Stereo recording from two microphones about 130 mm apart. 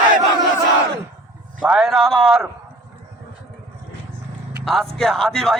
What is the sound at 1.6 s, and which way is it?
Speech, 5° right (ahead or behind).